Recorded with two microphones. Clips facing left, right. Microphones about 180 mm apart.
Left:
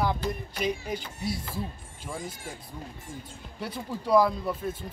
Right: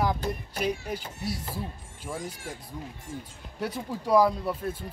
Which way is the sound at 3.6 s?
10° right (ahead or behind).